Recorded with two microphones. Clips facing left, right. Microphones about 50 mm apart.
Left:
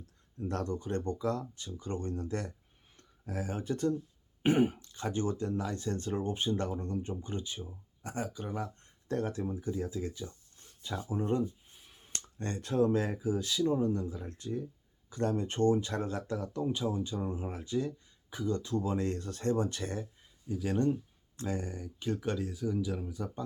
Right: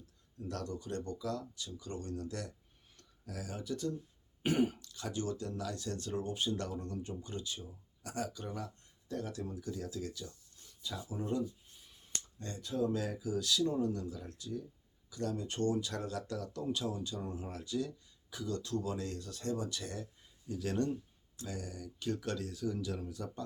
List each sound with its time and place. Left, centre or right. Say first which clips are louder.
0.3 s speech: left 6 dB; left
4.4 s speech: left 5 dB; left
9.0 s speech: left 7 dB; left
10.7 s a sound: left 5 dB; left
12.2 s speech: left 10 dB; left
20.5 s speech: left 4 dB; centre
21.3 s speech: left 7 dB; left; by 23.4 s centre